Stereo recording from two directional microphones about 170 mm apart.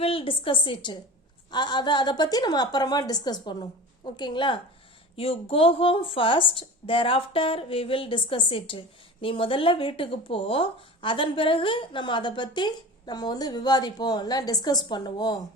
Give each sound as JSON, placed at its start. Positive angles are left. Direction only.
{"t": 0.0, "sound": "speech", "side_deg": 35}